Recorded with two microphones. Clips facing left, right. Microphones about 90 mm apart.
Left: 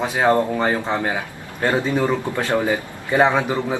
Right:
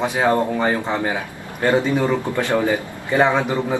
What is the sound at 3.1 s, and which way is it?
Speech, 15° left (ahead or behind).